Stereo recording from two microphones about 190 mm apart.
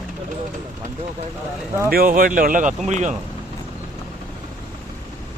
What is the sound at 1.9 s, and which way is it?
Speech, 50° right (ahead or behind).